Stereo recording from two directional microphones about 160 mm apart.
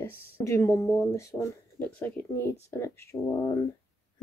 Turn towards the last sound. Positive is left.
turn(degrees=20)  # may be behind; listen again after turning